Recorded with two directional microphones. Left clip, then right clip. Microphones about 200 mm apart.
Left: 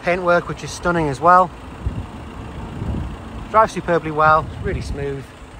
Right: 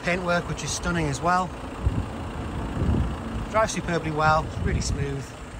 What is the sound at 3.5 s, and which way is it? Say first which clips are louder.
Speech: left 9 dB; 5° right (ahead or behind).